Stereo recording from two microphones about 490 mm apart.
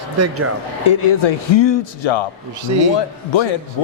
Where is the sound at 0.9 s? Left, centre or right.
Left.